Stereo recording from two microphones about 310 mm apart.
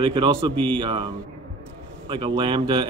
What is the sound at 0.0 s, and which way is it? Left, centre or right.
Speech, centre.